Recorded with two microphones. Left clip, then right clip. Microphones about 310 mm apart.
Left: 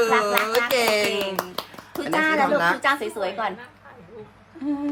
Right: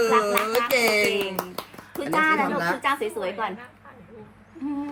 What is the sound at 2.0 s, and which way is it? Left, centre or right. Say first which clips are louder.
A woman's voice: left 1 dB; left.